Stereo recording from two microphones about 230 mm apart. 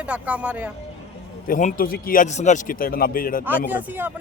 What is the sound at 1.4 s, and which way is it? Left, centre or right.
A man's voice, left.